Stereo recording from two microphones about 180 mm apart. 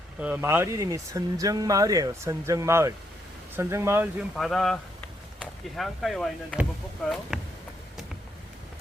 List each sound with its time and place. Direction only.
0.2 s speech: 10° right (ahead or behind)
4.4 s speech: centre (ahead or behind)